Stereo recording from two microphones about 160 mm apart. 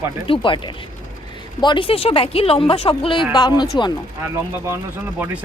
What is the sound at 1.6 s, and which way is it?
A woman's voice, 30° left (ahead or behind).